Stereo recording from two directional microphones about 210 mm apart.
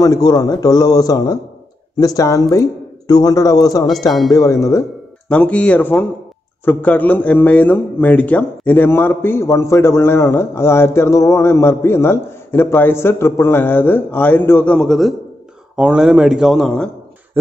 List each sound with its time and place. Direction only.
0.0 s a man's voice: 20° left (ahead or behind)